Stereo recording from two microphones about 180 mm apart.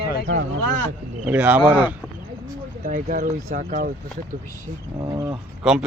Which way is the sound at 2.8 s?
50° right (ahead or behind).